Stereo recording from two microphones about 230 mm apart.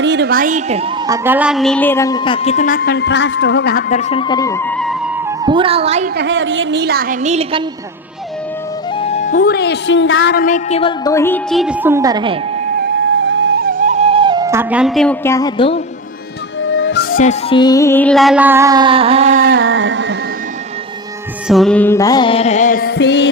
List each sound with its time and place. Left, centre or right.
0.0 s a woman's voice: right
1.0 s a woman's voice: centre
5.4 s speech: right
6.1 s a woman's voice: right
9.0 s speech: left
10.3 s a woman's voice: left; by 11.3 s centre
11.5 s music: centre
12.8 s music: right; by 15.8 s left
16.6 s music: left
17.5 s music: centre; by 19.4 s right
19.4 s carnatic music: right
21.4 s a woman's voice: centre; by 23.3 s left